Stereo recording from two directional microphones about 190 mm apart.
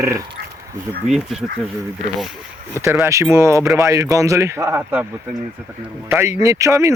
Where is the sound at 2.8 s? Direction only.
15° right (ahead or behind).